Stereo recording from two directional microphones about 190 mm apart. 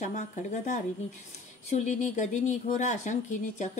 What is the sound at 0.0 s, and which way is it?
Speech, 40° left (ahead or behind).